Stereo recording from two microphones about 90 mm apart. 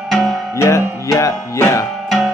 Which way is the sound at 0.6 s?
30° left (ahead or behind).